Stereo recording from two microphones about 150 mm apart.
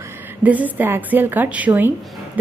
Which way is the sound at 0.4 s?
10° right (ahead or behind).